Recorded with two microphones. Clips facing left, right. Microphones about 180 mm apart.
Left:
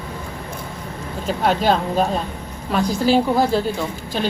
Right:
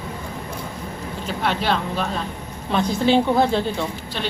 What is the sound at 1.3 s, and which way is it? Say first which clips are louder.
Speech: left 5 dB; 40° left (ahead or behind).